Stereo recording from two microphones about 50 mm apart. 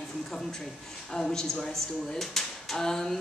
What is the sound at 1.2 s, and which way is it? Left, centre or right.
Speech, centre.